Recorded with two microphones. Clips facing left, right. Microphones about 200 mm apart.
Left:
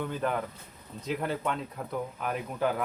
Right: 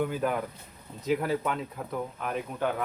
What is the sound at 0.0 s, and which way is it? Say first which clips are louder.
Speech: right 2 dB; 5° right (ahead or behind).